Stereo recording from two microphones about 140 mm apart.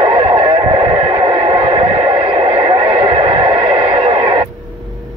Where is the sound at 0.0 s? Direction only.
35° right (ahead or behind).